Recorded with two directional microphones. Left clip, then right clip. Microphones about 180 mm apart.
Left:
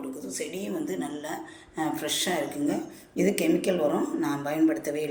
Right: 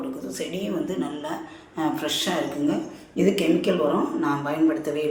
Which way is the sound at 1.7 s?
20° left (ahead or behind).